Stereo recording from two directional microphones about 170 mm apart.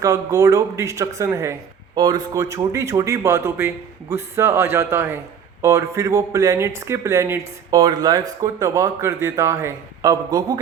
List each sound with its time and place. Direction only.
0.0 s speech: 20° right (ahead or behind)